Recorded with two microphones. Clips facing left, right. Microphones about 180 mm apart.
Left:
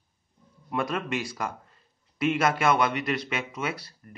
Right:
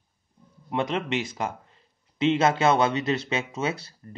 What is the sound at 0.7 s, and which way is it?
Speech, 20° right (ahead or behind).